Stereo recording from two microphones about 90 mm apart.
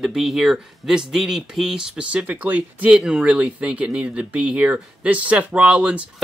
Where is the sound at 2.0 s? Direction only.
15° right (ahead or behind).